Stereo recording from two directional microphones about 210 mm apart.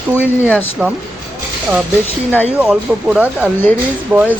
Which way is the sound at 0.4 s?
10° left (ahead or behind).